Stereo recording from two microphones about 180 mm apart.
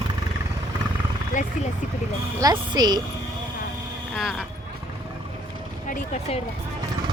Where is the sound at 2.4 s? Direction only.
25° right (ahead or behind).